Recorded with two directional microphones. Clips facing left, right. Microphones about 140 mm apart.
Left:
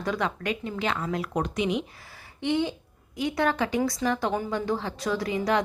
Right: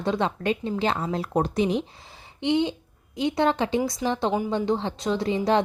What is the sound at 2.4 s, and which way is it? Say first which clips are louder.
Speech: right 3 dB; 20° right (ahead or behind).